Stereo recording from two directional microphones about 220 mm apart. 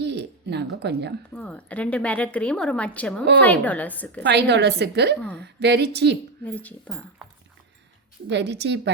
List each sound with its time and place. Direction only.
0.0 s a sound: 50° right (ahead or behind)
1.3 s a woman's voice: 5° left (ahead or behind)
4.2 s a woman's voice: 50° right (ahead or behind)
6.4 s a woman's voice: 5° left (ahead or behind)
8.3 s a woman's voice: 50° right (ahead or behind)